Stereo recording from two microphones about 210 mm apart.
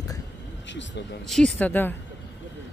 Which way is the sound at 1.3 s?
5° left (ahead or behind).